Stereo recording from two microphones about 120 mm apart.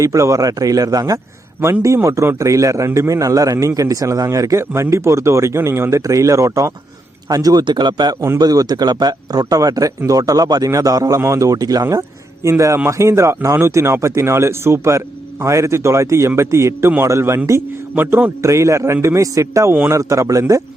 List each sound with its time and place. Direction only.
0.0 s a man's voice: 25° right (ahead or behind)